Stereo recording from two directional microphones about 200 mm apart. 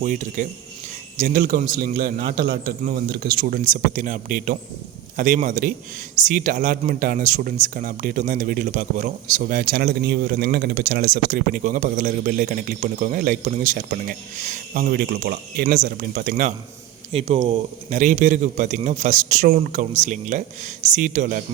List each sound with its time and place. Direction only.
0.0 s a man's voice: 40° right (ahead or behind)
16.3 s a man's voice: 40° right (ahead or behind)